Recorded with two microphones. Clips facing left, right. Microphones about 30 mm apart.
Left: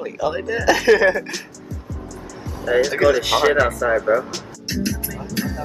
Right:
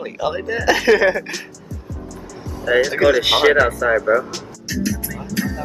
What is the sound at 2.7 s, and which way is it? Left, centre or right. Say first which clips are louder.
Music: right 1 dB; centre.